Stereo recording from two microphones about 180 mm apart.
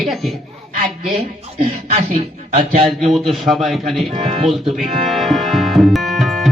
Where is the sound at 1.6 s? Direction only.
40° right (ahead or behind).